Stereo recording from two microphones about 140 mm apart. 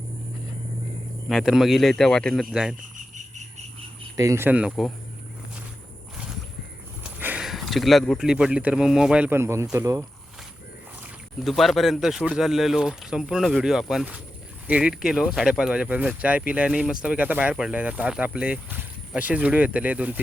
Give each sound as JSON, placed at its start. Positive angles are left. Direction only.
{"t": 1.3, "sound": "speech", "side_deg": 0}
{"t": 4.2, "sound": "speech", "side_deg": -20}
{"t": 7.0, "sound": "a sound", "side_deg": -10}
{"t": 7.4, "sound": "speech", "side_deg": 0}
{"t": 11.0, "sound": "speech", "side_deg": 0}